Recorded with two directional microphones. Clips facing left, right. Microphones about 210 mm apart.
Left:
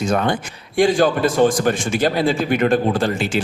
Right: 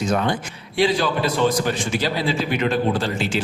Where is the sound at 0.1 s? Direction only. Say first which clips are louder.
Left 2 dB; 50° left (ahead or behind).